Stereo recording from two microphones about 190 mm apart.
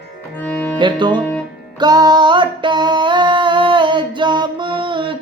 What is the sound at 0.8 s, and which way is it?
Music, 25° right (ahead or behind).